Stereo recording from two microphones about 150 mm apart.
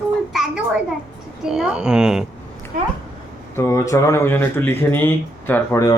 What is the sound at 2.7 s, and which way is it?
Speech, 70° right (ahead or behind).